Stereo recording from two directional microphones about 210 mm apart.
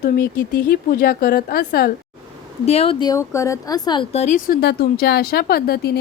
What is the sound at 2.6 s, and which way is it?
Speech, 30° left (ahead or behind).